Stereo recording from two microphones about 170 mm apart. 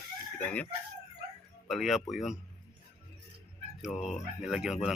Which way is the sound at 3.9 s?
5° left (ahead or behind).